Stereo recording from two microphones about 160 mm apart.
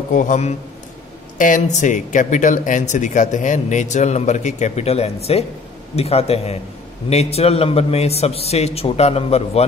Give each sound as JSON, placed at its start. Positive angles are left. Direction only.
{"t": 0.1, "sound": "a man's voice", "side_deg": 50}